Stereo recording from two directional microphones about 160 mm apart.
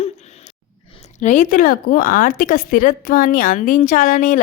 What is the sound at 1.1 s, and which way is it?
Speech, 50° left (ahead or behind).